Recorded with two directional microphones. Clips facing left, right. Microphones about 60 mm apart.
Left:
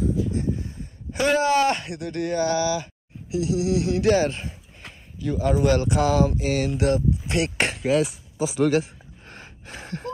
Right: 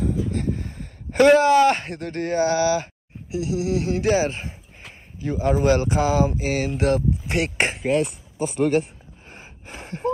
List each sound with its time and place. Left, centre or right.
0.3 s speech: right
4.1 s speech: centre
5.2 s speech: right
7.8 s speech: centre
9.3 s gasp: centre